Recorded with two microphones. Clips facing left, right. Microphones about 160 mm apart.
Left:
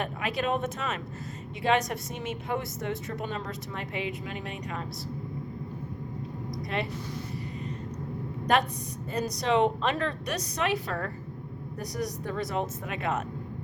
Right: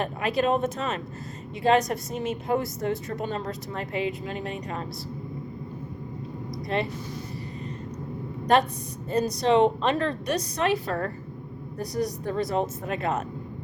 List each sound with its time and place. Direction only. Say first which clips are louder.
0.0 s a woman's voice: right 5 dB; 35° right (ahead or behind)
6.7 s a woman's voice: right 5 dB; 35° right (ahead or behind)
9.1 s a woman's voice: right 5 dB; 30° right (ahead or behind)